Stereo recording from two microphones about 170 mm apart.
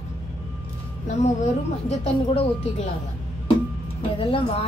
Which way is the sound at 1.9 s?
40° left (ahead or behind).